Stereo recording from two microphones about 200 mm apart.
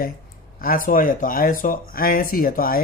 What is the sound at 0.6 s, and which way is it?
Speech, 45° left (ahead or behind).